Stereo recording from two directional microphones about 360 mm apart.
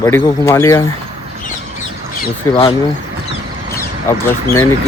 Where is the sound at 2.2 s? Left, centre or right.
Centre.